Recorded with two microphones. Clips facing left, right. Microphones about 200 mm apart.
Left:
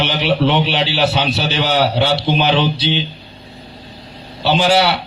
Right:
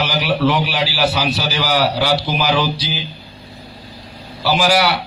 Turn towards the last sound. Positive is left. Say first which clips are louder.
# left 2 dB
turn(degrees=25)  # may be behind; listen again after turning